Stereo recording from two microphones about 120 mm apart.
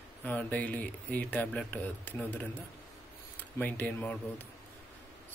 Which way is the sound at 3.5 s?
15° left (ahead or behind).